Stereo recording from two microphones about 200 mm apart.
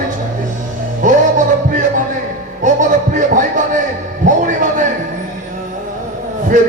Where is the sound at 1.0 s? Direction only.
40° right (ahead or behind).